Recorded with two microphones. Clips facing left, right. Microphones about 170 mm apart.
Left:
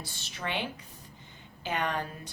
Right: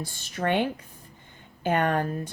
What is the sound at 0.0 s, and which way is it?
Speech, 50° right (ahead or behind).